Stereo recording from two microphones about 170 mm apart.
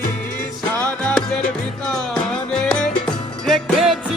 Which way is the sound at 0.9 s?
5° left (ahead or behind).